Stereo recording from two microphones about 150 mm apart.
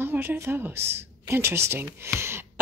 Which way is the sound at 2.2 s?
15° right (ahead or behind).